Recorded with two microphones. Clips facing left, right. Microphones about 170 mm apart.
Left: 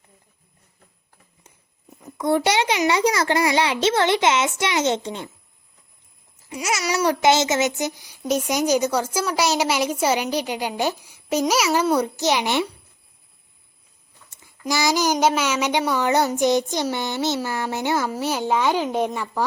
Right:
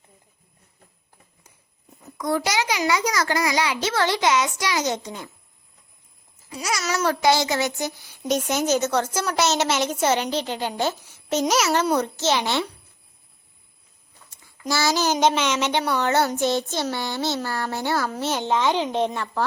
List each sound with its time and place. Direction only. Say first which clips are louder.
2.1 s a child's voice: left 4 dB; 25° left (ahead or behind)
6.8 s a child's voice: left 2 dB; 15° left (ahead or behind)
14.7 s a woman's voice: left 1 dB; 15° left (ahead or behind)